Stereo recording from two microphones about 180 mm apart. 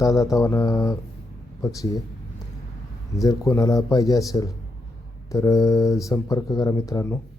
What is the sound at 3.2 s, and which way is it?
Speech, 15° left (ahead or behind).